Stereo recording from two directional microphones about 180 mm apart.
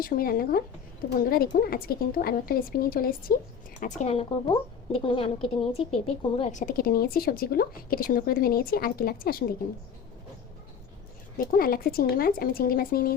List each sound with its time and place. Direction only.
0.0 s speech: 55° left (ahead or behind)
3.8 s a woman's voice: 40° left (ahead or behind)
11.3 s speech: 55° left (ahead or behind)